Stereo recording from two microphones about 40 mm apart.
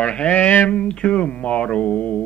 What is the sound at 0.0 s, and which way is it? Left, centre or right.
Mantra, left.